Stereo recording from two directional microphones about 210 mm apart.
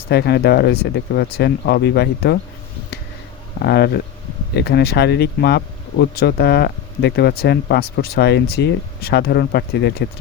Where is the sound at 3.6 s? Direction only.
50° left (ahead or behind).